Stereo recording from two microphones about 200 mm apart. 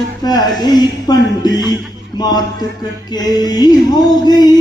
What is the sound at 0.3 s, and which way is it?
Speech, 20° left (ahead or behind).